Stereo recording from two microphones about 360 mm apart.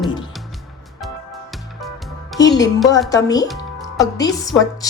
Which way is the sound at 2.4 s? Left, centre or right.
Centre.